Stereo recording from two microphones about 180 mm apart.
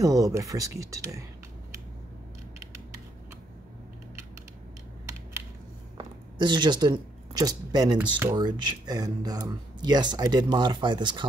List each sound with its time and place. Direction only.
0.0 s speech: 20° right (ahead or behind)
5.9 s speech: 25° right (ahead or behind)
8.4 s speech: 25° right (ahead or behind)